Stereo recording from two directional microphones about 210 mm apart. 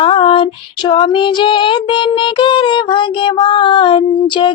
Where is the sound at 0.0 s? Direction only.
25° left (ahead or behind).